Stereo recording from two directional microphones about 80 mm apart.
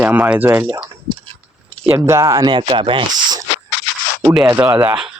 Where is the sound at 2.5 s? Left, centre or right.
Right.